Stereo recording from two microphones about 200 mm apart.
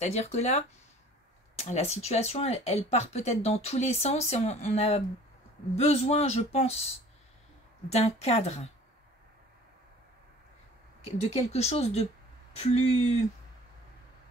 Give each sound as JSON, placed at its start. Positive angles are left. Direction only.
{"t": 0.0, "sound": "speech", "side_deg": 35}
{"t": 7.9, "sound": "speech", "side_deg": 30}
{"t": 11.2, "sound": "speech", "side_deg": 30}